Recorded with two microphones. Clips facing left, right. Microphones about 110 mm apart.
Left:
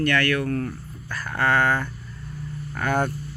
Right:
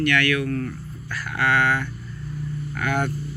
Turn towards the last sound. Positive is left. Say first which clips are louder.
# left 1 dB
turn(degrees=35)  # may be behind; listen again after turning